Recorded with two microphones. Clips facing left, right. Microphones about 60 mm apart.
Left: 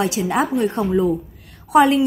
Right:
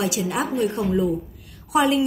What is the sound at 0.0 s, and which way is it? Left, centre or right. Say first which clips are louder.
A woman's voice: left 4 dB; left.